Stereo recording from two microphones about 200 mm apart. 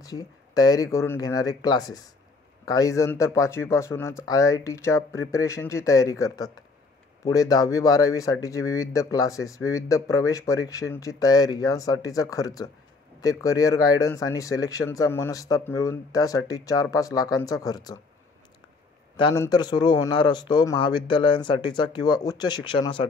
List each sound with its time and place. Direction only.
0.0 s speech: 20° left (ahead or behind)
19.1 s a man's voice: 25° left (ahead or behind)